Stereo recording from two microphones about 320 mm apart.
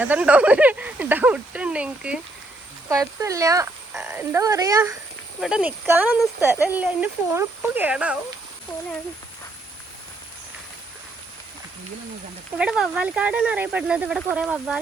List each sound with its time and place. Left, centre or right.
0.0 s speech: centre
12.5 s speech: centre